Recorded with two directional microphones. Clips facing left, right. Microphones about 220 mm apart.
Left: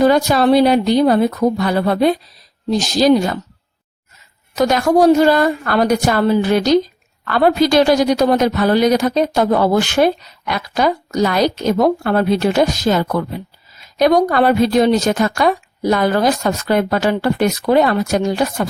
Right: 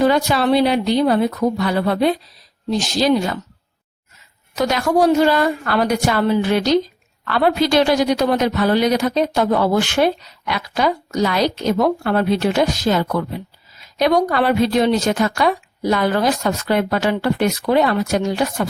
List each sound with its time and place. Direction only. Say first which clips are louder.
0.0 s a woman's voice: left 3 dB; 40° left (ahead or behind)
4.5 s a woman's voice: left 4 dB; 45° left (ahead or behind)